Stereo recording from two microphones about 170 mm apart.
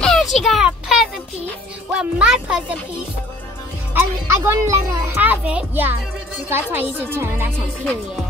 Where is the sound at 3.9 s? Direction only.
15° right (ahead or behind).